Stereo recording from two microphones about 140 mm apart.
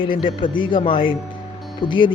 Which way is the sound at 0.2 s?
35° left (ahead or behind).